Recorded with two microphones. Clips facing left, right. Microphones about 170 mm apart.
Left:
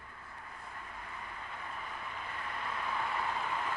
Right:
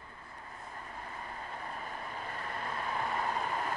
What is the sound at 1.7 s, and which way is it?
Vehicle, 40° right (ahead or behind).